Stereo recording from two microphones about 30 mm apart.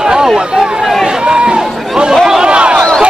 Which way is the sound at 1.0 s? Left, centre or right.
Right.